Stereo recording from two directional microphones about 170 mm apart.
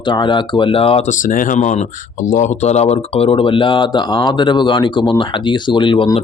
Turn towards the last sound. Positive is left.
turn(degrees=30)  # may be behind; listen again after turning